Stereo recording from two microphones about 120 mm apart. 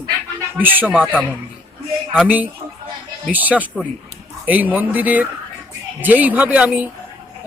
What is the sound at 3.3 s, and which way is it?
A man's voice, 15° right (ahead or behind).